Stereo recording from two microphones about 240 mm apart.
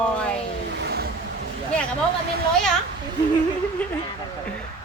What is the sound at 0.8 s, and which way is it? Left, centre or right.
Vehicle, right.